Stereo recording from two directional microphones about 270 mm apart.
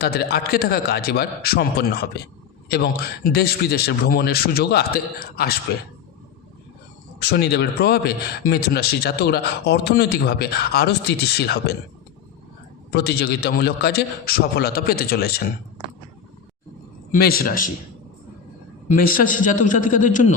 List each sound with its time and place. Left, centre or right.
0.0 s a man's voice: left
7.2 s a man's voice: left
12.9 s a man's voice: left
17.1 s a man's voice: left
18.9 s a man's voice: left